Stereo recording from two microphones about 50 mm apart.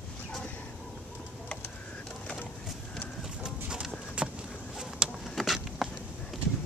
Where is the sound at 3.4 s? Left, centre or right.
Centre.